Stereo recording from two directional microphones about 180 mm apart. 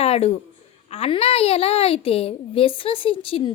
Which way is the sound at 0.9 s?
35° left (ahead or behind).